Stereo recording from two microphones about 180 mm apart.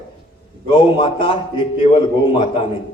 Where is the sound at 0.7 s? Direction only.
30° left (ahead or behind).